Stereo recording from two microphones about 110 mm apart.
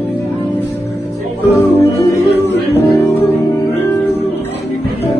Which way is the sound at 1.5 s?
25° left (ahead or behind).